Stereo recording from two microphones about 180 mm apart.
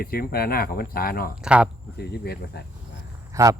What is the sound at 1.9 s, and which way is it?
Speech, 65° left (ahead or behind).